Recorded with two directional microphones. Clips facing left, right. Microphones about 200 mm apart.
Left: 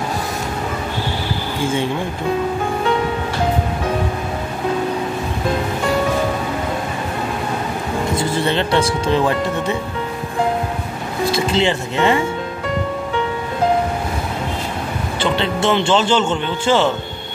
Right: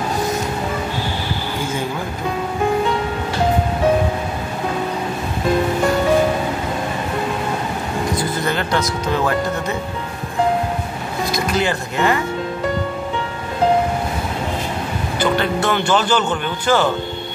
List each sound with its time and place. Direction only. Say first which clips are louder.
8.2 s a man's voice: left 3 dB; 30° left (ahead or behind)
11.3 s a man's voice: left 2 dB; 25° left (ahead or behind)
15.1 s a man's voice: right 1 dB; 25° left (ahead or behind)